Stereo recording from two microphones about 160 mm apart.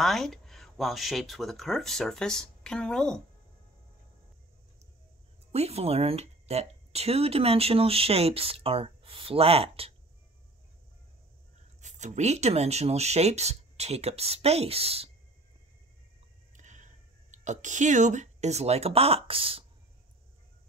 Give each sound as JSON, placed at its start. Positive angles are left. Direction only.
{"t": 0.0, "sound": "speech", "side_deg": 0}
{"t": 5.5, "sound": "speech", "side_deg": -40}
{"t": 11.8, "sound": "speech", "side_deg": -50}
{"t": 16.5, "sound": "speech", "side_deg": -50}